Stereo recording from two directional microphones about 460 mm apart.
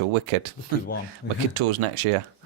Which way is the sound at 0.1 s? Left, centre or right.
Right.